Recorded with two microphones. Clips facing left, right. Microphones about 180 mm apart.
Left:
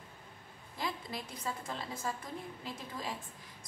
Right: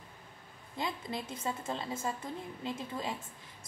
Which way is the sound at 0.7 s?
25° right (ahead or behind).